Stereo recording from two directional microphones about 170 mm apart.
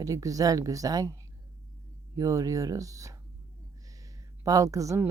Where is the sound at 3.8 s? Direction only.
20° right (ahead or behind).